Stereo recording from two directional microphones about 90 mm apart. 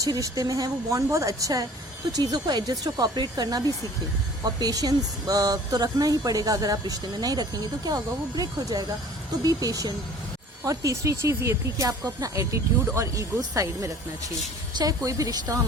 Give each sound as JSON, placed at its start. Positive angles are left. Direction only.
{"t": 0.0, "sound": "speech", "side_deg": -40}